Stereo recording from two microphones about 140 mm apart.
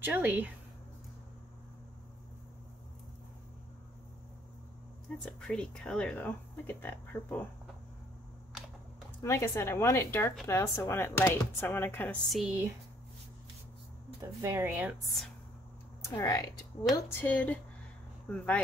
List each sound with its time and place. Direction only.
0.0 s speech: 15° right (ahead or behind)
5.2 s speech: 5° left (ahead or behind)
9.2 s a woman's voice: 20° left (ahead or behind)
12.3 s speech: 5° right (ahead or behind)
14.4 s speech: 15° right (ahead or behind)
16.0 s speech: 25° left (ahead or behind)
17.1 s speech: 15° left (ahead or behind)